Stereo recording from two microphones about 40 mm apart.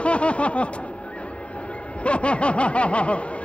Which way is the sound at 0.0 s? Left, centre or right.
Left.